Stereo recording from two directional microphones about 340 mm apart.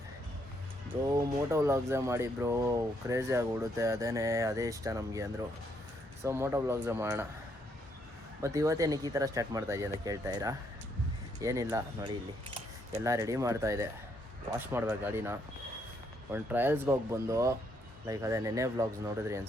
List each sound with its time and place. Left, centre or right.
1.0 s speech: centre
8.4 s speech: centre